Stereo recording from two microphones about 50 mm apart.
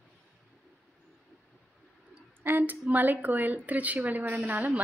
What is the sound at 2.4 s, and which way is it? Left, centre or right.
A woman's voice, right.